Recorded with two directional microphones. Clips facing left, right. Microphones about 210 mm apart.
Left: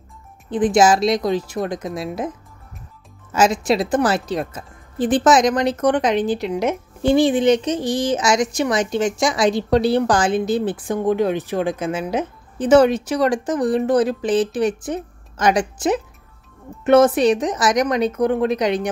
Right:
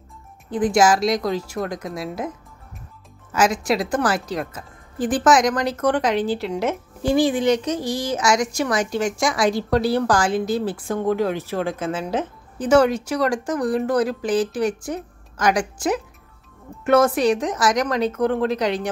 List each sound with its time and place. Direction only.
0.5 s speech: 20° left (ahead or behind)
3.3 s speech: 25° left (ahead or behind)